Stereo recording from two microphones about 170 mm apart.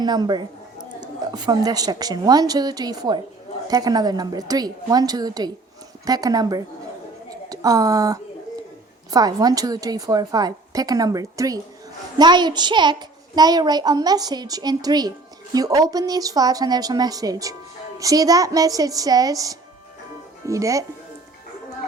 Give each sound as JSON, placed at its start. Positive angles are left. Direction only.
{"t": 0.0, "sound": "a child's voice", "side_deg": -25}